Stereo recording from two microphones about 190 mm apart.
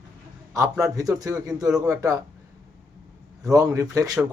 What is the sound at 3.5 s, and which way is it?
Speech, 15° right (ahead or behind).